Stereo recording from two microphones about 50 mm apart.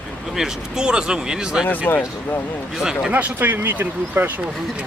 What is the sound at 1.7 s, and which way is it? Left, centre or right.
Speech, left.